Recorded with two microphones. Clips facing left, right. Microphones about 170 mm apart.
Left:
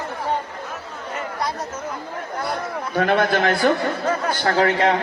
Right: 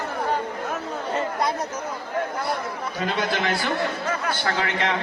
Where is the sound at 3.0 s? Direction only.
55° left (ahead or behind).